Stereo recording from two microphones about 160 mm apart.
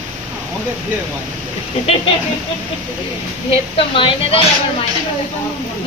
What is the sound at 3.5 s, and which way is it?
Speech, 35° left (ahead or behind).